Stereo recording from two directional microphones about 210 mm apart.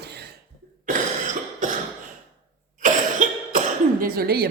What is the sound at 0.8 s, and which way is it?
Cough, 40° right (ahead or behind).